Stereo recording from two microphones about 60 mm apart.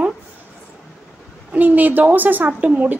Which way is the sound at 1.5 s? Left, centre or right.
Right.